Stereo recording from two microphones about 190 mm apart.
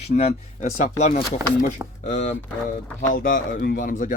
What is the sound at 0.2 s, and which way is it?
Speech, 40° left (ahead or behind).